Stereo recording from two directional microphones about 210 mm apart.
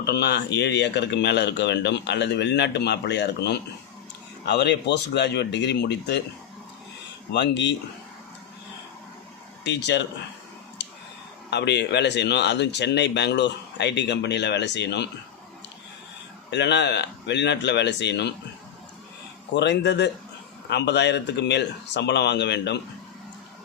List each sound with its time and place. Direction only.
0.0 s speech: 50° left (ahead or behind)
7.3 s speech: 55° left (ahead or behind)
9.6 s speech: 55° left (ahead or behind)
10.8 s a sound: 55° left (ahead or behind)
11.5 s speech: 55° left (ahead or behind)
16.5 s speech: 55° left (ahead or behind)
19.5 s speech: 55° left (ahead or behind)